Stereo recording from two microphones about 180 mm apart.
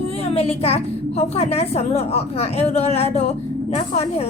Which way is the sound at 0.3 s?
35° left (ahead or behind).